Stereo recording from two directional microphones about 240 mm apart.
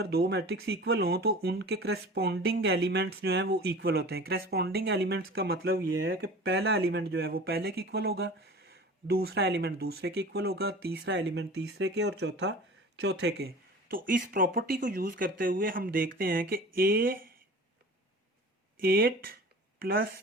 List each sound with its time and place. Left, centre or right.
0.0 s speech: right
18.8 s speech: right